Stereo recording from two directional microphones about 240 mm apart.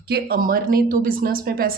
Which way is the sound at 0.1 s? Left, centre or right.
Right.